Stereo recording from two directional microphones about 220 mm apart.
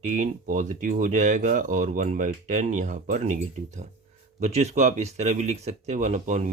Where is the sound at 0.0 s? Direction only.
35° right (ahead or behind).